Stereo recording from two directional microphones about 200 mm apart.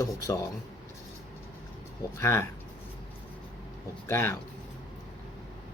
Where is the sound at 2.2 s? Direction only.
15° left (ahead or behind).